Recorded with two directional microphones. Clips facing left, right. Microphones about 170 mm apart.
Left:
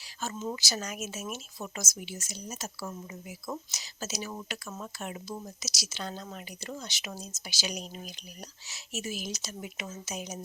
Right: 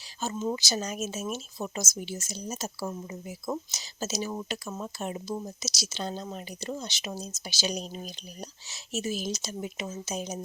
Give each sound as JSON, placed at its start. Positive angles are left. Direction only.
{"t": 0.2, "sound": "speech", "side_deg": -20}